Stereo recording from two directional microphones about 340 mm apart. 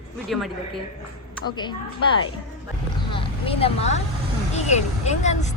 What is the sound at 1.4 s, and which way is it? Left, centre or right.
Speech, centre.